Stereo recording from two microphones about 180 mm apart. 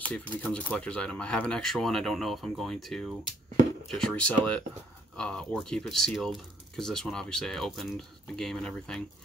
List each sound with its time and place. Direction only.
0.1 s speech: 5° left (ahead or behind)